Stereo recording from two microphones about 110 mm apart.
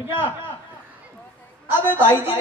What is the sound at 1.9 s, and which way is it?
Speech, 20° right (ahead or behind).